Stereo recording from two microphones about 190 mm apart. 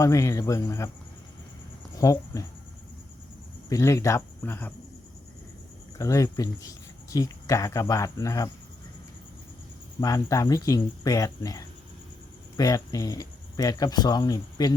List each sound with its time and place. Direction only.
0.0 s speech: 15° left (ahead or behind)
2.0 s speech: 15° left (ahead or behind)
3.7 s speech: 15° left (ahead or behind)
6.0 s speech: 15° left (ahead or behind)
10.0 s speech: 15° left (ahead or behind)